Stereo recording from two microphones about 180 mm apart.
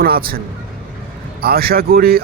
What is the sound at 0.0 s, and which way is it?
A man's voice, 55° right (ahead or behind).